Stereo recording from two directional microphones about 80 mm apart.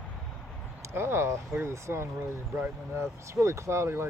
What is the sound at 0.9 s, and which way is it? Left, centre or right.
Speech, right.